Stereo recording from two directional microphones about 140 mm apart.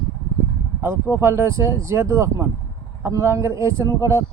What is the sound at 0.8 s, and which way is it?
Speech, 15° right (ahead or behind).